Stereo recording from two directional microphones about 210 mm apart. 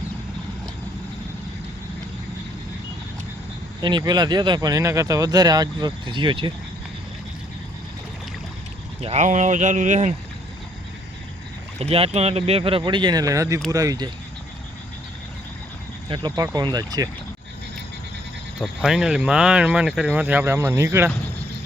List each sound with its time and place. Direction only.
3.8 s speech: 20° right (ahead or behind)
9.0 s speech: 30° right (ahead or behind)
11.8 s speech: 30° right (ahead or behind)
16.0 s speech: 20° right (ahead or behind)
18.6 s speech: centre (ahead or behind)